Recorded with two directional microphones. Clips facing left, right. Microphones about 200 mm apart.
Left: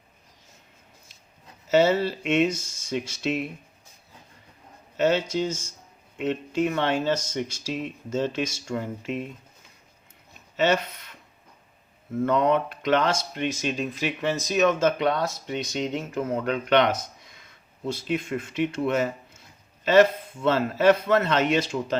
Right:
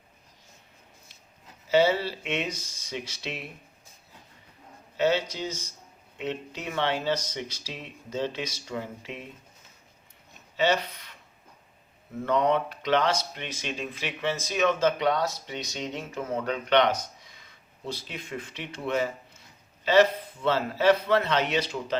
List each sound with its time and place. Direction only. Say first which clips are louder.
1.7 s speech: left 3 dB; 50° left (ahead or behind)
4.9 s speech: left 3 dB; 50° left (ahead or behind)
10.6 s speech: left 2 dB; 50° left (ahead or behind)
12.2 s speech: left 2 dB; 50° left (ahead or behind)
16.7 s speech: left 1 dB; 50° left (ahead or behind)